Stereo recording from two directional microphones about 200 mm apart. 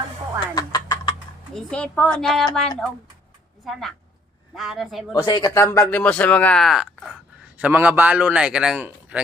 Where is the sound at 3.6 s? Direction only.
Centre (ahead or behind).